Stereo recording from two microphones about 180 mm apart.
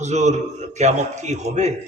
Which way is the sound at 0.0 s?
40° right (ahead or behind).